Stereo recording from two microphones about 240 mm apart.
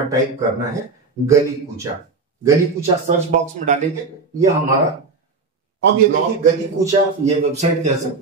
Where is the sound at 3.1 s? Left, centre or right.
Right.